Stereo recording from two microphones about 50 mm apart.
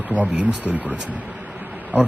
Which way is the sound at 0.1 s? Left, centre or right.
Right.